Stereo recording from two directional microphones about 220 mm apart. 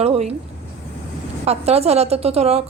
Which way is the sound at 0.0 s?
30° right (ahead or behind).